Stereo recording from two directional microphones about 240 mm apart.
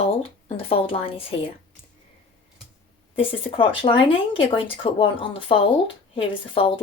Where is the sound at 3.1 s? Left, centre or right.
Left.